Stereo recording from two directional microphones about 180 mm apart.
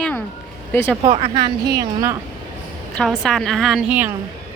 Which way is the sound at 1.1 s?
35° right (ahead or behind).